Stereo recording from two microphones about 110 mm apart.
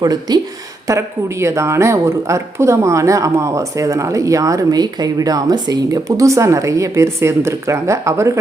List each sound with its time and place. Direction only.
0.0 s speech: 35° right (ahead or behind)
0.9 s speech: 25° right (ahead or behind)